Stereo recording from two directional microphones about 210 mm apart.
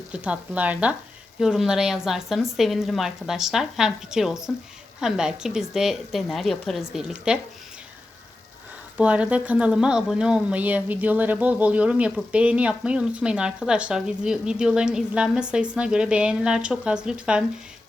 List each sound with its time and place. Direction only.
0.1 s speech: 5° right (ahead or behind)
9.0 s speech: 5° right (ahead or behind)